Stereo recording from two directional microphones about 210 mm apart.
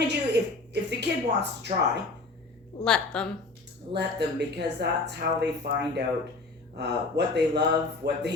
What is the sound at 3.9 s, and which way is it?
Speech, 50° right (ahead or behind).